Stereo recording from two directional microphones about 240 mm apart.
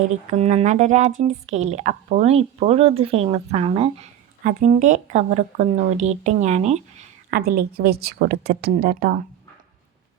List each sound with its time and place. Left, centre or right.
0.3 s speech: right
7.3 s speech: right